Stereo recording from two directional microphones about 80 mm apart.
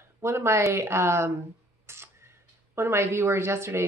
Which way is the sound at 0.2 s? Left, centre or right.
Right.